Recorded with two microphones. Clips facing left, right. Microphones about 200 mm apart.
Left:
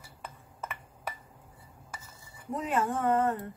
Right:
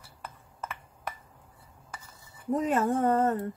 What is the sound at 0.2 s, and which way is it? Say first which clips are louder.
Glass: right 1 dB; centre (ahead or behind).